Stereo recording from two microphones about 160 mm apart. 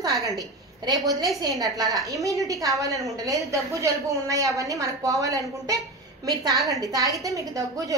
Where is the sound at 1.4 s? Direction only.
25° right (ahead or behind).